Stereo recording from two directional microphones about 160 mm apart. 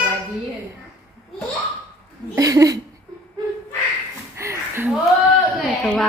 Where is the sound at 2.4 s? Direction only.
20° right (ahead or behind).